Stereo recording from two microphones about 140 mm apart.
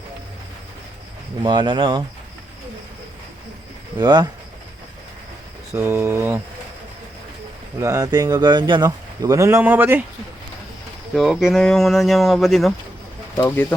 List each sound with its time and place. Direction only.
1.4 s speech: 30° right (ahead or behind)
3.9 s speech: 30° right (ahead or behind)
5.7 s speech: 15° right (ahead or behind)
7.8 s speech: 25° right (ahead or behind)
11.1 s speech: centre (ahead or behind)